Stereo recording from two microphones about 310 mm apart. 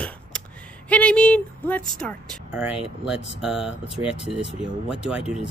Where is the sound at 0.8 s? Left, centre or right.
Centre.